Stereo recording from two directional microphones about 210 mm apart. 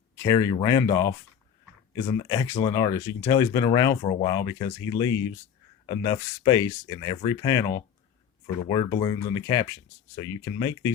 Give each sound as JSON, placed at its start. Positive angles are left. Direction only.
{"t": 0.2, "sound": "speech", "side_deg": 15}
{"t": 8.7, "sound": "speech", "side_deg": 20}